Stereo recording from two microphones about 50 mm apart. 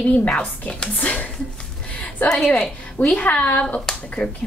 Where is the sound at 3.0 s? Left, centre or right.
Left.